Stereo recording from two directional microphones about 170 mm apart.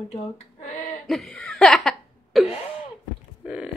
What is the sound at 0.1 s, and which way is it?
Female singing, 45° left (ahead or behind).